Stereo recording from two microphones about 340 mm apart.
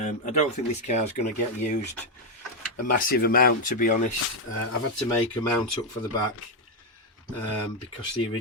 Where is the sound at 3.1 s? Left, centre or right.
Left.